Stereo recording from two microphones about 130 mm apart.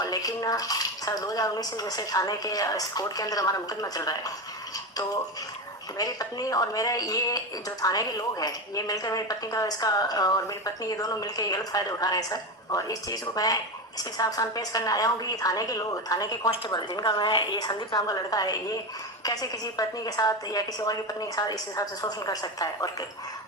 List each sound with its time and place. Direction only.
0.0 s a woman's voice: 30° left (ahead or behind)
6.0 s a woman's voice: 30° left (ahead or behind)